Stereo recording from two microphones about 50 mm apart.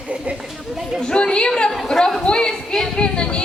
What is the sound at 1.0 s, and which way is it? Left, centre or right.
A woman's voice, centre.